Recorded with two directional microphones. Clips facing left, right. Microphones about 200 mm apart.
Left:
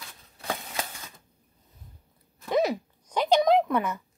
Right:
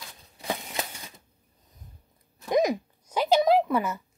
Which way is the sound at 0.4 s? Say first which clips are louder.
Right 1 dB; 15° right (ahead or behind).